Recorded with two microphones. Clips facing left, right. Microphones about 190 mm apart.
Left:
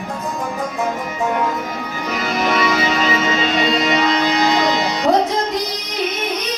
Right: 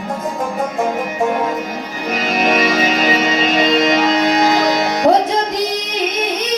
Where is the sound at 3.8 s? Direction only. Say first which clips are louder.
Right 3 dB; 45° right (ahead or behind).